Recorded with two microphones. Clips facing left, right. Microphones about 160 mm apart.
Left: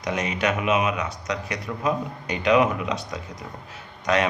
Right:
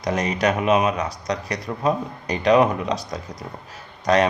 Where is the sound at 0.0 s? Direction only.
35° right (ahead or behind).